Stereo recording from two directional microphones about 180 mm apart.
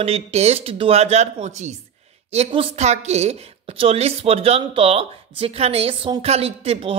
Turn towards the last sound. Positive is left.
turn(degrees=-30)  # may be behind; listen again after turning